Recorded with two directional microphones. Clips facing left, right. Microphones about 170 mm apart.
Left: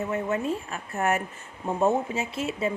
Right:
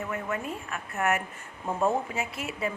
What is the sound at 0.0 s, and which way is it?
A woman's voice, 25° left (ahead or behind).